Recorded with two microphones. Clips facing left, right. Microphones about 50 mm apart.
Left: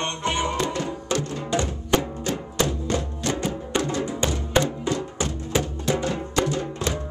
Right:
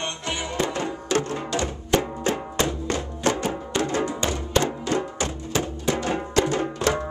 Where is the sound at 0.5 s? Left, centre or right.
Right.